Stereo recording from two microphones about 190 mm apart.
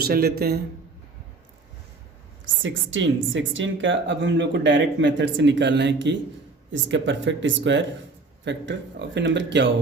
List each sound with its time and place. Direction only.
0.0 s speech: 55° right (ahead or behind)
2.6 s speech: 80° right